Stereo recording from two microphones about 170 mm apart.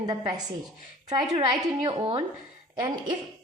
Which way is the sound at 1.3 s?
20° right (ahead or behind).